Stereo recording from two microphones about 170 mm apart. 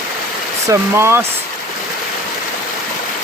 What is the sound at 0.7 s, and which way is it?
Speech, 15° right (ahead or behind).